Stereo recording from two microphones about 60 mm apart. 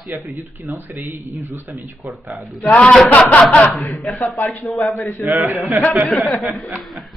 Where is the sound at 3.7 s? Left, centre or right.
Left.